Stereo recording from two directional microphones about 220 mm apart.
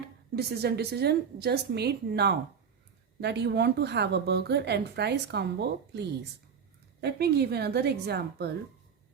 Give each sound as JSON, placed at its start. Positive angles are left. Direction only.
{"t": 0.3, "sound": "a woman's voice", "side_deg": -50}